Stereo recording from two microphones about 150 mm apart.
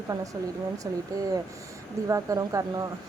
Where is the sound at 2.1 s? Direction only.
20° right (ahead or behind).